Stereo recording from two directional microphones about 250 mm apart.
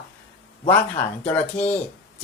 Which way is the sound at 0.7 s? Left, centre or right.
Centre.